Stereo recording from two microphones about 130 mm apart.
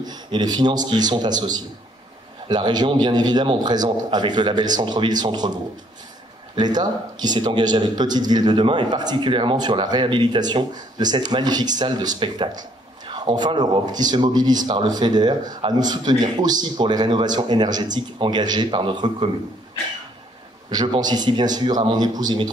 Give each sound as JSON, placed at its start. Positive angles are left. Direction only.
{"t": 0.0, "sound": "a man's voice", "side_deg": -30}
{"t": 20.7, "sound": "a man's voice", "side_deg": -35}